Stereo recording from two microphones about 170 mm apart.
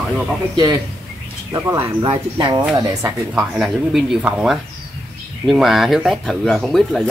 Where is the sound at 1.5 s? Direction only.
20° right (ahead or behind).